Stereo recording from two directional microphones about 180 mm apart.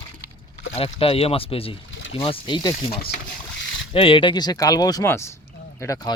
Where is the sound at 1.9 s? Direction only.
90° left.